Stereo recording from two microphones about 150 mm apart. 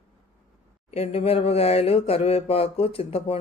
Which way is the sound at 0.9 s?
40° left (ahead or behind).